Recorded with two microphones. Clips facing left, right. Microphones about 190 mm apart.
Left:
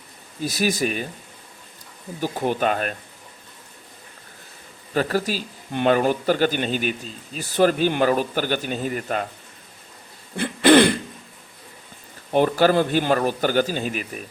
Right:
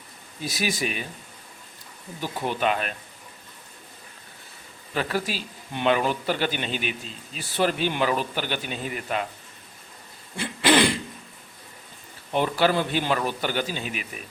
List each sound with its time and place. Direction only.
0.4 s speech: 40° left (ahead or behind)
2.2 s speech: 45° left (ahead or behind)
4.9 s speech: 40° left (ahead or behind)
10.3 s throat clearing: 55° left (ahead or behind)
12.3 s speech: 45° left (ahead or behind)